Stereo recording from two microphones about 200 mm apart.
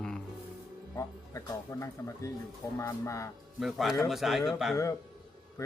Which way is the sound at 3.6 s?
Centre (ahead or behind).